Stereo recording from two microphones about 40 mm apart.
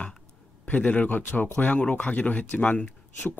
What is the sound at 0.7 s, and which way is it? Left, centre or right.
Speech, left.